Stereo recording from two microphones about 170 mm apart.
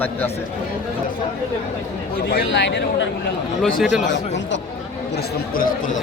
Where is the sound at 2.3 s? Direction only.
90° left.